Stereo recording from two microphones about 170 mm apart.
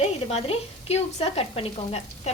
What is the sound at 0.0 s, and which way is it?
A woman's voice, 35° left (ahead or behind).